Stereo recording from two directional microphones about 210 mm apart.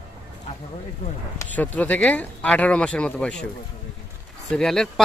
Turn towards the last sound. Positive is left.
turn(degrees=0)  # may be behind; listen again after turning